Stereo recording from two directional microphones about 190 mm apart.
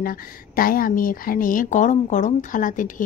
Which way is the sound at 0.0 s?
50° left (ahead or behind).